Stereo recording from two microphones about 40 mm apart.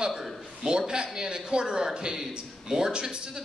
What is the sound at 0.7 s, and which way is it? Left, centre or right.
A man's voice, centre.